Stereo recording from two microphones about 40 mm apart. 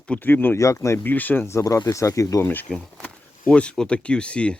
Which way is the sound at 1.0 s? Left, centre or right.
Left.